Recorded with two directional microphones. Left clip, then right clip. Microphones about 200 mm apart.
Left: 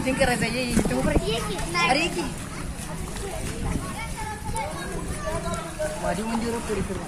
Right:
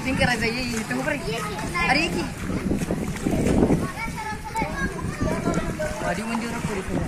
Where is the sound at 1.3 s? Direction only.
40° left (ahead or behind).